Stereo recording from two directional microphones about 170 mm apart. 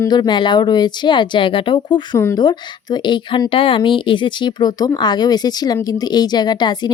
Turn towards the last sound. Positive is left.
turn(degrees=25)  # may be behind; listen again after turning